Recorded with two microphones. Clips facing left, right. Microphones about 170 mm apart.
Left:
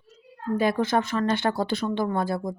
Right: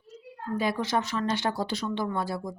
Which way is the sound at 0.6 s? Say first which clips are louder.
Left 4 dB; 55° left (ahead or behind).